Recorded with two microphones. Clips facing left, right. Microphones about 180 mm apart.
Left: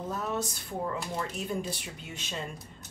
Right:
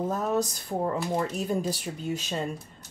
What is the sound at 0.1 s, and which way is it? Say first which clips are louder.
Speech: right 6 dB; 40° right (ahead or behind).